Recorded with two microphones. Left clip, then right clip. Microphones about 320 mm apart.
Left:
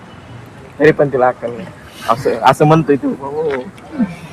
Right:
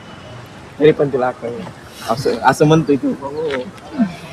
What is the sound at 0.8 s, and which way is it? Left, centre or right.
Speech, left.